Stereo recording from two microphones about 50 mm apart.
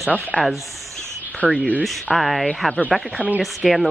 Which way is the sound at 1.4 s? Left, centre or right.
Left.